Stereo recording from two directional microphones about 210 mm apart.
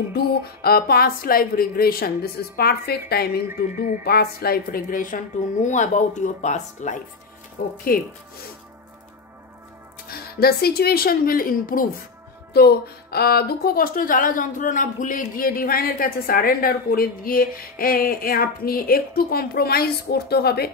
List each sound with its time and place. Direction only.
0.1 s speech: 45° left (ahead or behind)
10.0 s speech: 45° left (ahead or behind)